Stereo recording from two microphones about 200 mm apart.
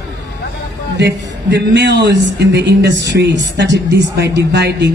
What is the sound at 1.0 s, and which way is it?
Speech, 55° right (ahead or behind).